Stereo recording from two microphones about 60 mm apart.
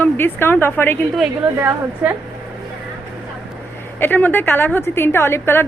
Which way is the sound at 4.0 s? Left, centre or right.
Left.